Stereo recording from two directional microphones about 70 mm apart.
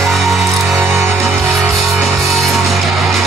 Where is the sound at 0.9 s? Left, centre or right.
Right.